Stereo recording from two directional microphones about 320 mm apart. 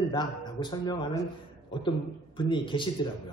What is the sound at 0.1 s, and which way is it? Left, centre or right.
Speech, centre.